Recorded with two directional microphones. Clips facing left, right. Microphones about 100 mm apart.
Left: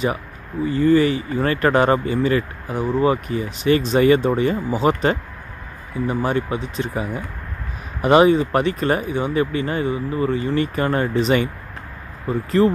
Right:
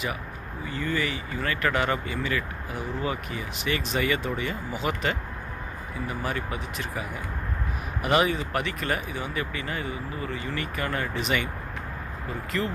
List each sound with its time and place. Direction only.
0.7 s speech: 35° left (ahead or behind)
12.4 s speech: 35° left (ahead or behind)